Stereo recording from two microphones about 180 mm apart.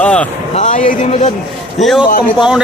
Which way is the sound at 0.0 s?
5° left (ahead or behind).